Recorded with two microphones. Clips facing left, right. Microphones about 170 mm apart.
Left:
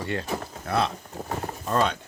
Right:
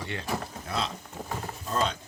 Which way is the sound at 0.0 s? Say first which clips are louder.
Left 6 dB; 45° left (ahead or behind).